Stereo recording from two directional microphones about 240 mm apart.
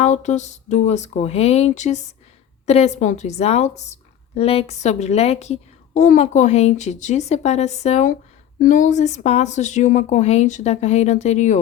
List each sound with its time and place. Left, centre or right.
0.0 s a woman's voice: left